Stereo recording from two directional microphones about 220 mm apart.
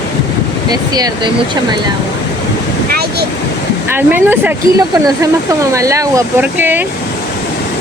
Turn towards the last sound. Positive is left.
turn(degrees=-10)  # may be behind; listen again after turning